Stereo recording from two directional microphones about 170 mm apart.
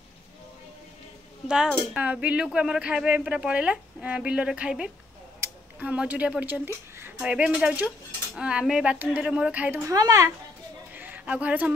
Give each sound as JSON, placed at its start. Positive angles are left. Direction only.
{"t": 1.5, "sound": "a woman's voice", "side_deg": -5}
{"t": 9.8, "sound": "a woman's voice", "side_deg": -20}
{"t": 10.9, "sound": "a sound", "side_deg": -10}